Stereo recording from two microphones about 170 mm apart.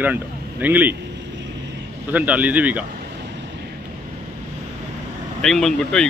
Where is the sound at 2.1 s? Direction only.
10° right (ahead or behind).